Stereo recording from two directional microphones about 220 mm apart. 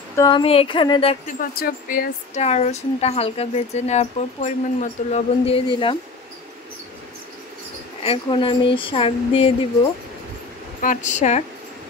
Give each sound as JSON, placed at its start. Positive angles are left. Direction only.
{"t": 0.1, "sound": "speech", "side_deg": 20}
{"t": 1.2, "sound": "speech", "side_deg": 40}
{"t": 8.0, "sound": "speech", "side_deg": 25}
{"t": 10.8, "sound": "speech", "side_deg": 35}